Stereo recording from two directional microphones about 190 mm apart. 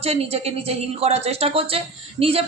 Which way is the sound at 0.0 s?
30° right (ahead or behind).